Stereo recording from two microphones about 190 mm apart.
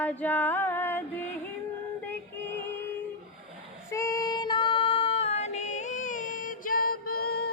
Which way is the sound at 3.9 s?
15° left (ahead or behind).